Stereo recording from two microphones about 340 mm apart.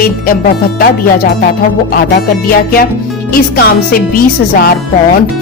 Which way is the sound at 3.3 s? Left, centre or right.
Left.